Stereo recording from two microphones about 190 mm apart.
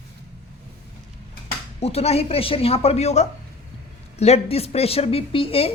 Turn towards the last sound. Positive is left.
turn(degrees=30)  # may be behind; listen again after turning